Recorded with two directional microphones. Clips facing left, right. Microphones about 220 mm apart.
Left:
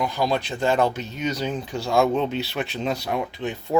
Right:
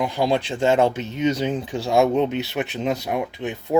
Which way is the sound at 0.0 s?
25° right (ahead or behind).